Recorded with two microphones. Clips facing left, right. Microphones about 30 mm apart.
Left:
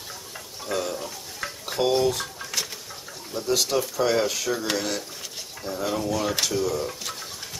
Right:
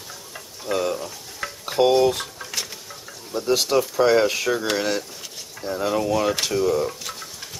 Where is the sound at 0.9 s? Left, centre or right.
Centre.